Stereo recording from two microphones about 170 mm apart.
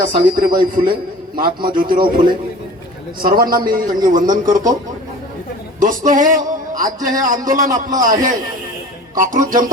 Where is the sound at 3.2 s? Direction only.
60° right (ahead or behind).